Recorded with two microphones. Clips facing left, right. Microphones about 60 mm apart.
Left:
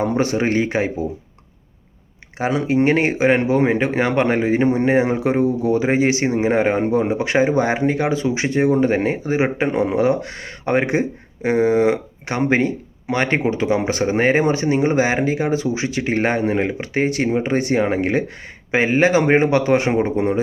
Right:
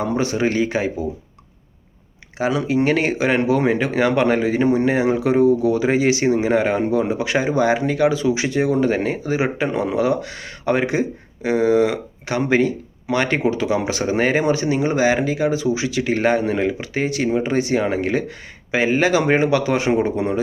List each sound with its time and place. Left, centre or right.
0.0 s speech: left
2.4 s speech: left